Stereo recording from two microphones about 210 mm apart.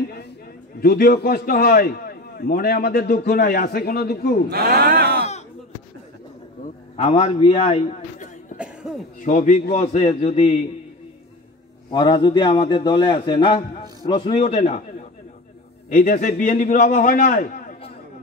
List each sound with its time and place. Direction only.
0.7 s a man's voice: 45° left (ahead or behind)
4.5 s speech: 45° right (ahead or behind)
7.0 s a man's voice: 30° left (ahead or behind)
8.5 s cough: 5° right (ahead or behind)
9.2 s a man's voice: 40° left (ahead or behind)
11.9 s a man's voice: 20° left (ahead or behind); by 17.7 s 40° left (ahead or behind)